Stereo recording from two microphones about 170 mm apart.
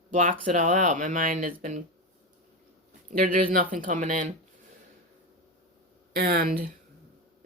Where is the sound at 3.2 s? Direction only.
55° right (ahead or behind).